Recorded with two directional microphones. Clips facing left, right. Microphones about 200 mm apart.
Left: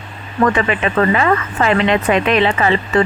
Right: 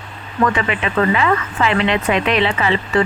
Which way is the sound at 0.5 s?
45° left (ahead or behind).